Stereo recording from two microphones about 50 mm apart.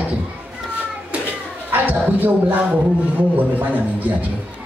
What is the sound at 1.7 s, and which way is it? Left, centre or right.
Speech, right.